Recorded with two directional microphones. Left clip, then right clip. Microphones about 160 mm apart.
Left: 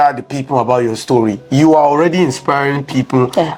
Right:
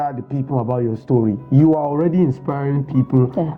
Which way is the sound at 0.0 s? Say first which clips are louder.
Left 11 dB; 10° left (ahead or behind).